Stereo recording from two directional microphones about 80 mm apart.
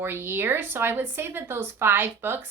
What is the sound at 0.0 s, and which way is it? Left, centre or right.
Speech, right.